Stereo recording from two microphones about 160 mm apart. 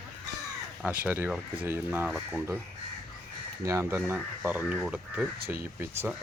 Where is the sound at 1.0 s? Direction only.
10° right (ahead or behind).